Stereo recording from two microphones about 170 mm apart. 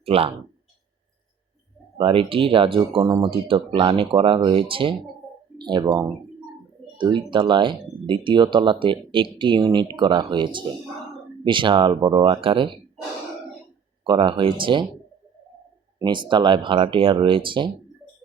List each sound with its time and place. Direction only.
0.0 s speech: 35° right (ahead or behind)
2.0 s speech: 30° right (ahead or behind)
14.0 s speech: 30° right (ahead or behind)
16.0 s speech: 25° right (ahead or behind)